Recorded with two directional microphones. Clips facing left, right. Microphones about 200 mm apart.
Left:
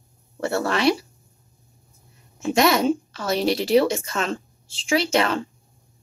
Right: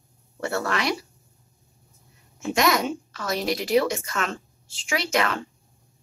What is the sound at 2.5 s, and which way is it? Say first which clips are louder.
A woman's voice: left 4 dB; 30° left (ahead or behind).